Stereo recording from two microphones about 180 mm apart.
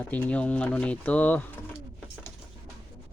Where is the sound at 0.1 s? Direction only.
5° left (ahead or behind).